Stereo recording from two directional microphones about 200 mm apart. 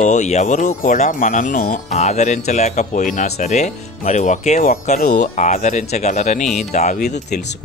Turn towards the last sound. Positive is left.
turn(degrees=35)  # may be behind; listen again after turning